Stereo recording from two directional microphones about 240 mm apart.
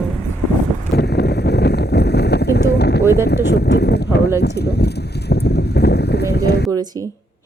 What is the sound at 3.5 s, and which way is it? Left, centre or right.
Speech, left.